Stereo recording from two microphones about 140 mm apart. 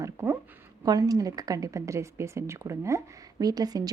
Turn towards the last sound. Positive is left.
turn(degrees=-25)  # may be behind; listen again after turning